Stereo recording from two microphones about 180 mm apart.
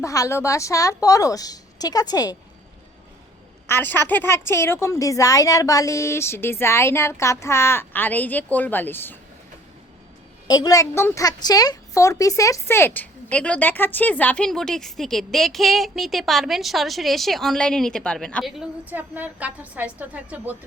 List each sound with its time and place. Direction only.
0.0 s a woman's voice: 20° left (ahead or behind)
3.7 s a woman's voice: 10° left (ahead or behind)
10.5 s a woman's voice: 20° left (ahead or behind); by 20.6 s 10° right (ahead or behind)